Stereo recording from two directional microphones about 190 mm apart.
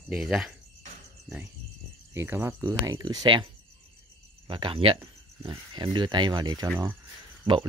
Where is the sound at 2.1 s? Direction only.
10° right (ahead or behind).